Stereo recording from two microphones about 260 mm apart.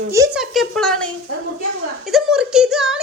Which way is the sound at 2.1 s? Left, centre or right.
Centre.